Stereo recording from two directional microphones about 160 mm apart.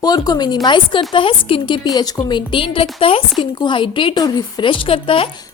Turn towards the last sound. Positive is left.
turn(degrees=35)  # may be behind; listen again after turning